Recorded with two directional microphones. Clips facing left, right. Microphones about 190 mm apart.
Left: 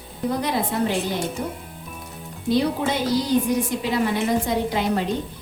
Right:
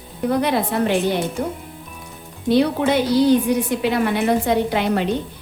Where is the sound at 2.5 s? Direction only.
65° right (ahead or behind).